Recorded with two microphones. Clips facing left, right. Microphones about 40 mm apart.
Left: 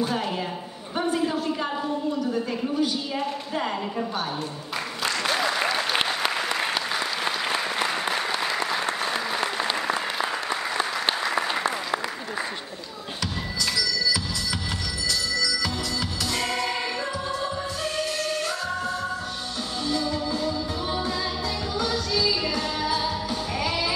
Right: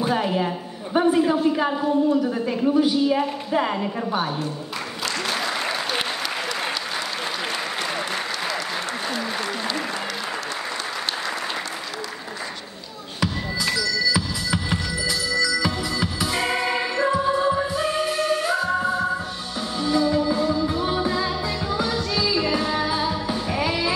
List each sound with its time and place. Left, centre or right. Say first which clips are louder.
0.0 s a sound: right 4 dB; centre
0.9 s a woman's voice: right 6 dB; centre
5.0 s applause: left 1 dB; centre
7.5 s applause: left 1 dB; centre
13.2 s music: right 5 dB; centre